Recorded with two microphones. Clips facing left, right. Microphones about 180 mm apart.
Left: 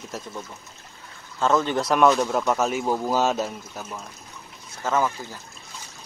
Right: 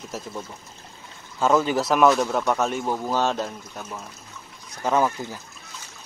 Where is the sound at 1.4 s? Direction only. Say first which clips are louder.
Right 1 dB; 10° right (ahead or behind).